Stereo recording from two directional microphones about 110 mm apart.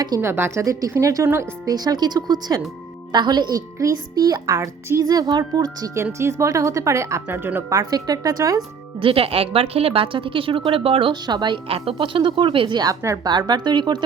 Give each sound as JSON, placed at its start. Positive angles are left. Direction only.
{"t": 0.2, "sound": "speech", "side_deg": -20}
{"t": 1.7, "sound": "speech", "side_deg": -35}
{"t": 7.7, "sound": "speech", "side_deg": -35}
{"t": 9.0, "sound": "a woman's voice", "side_deg": -55}
{"t": 11.7, "sound": "a woman's voice", "side_deg": -55}
{"t": 13.0, "sound": "speech", "side_deg": -30}
{"t": 13.3, "sound": "speech", "side_deg": -40}